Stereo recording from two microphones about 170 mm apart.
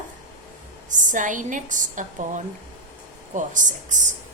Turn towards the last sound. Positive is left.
turn(degrees=-45)  # may be behind; listen again after turning